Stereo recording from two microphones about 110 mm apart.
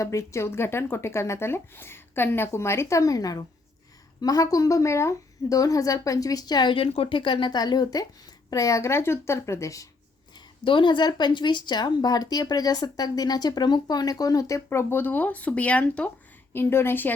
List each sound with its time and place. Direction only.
0.0 s a woman's voice: 25° left (ahead or behind)
10.3 s speech: 50° left (ahead or behind); by 17.2 s 20° left (ahead or behind)